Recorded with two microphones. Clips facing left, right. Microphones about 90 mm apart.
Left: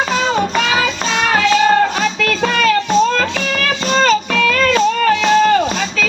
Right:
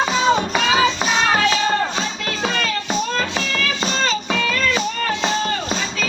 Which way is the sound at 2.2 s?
70° left (ahead or behind).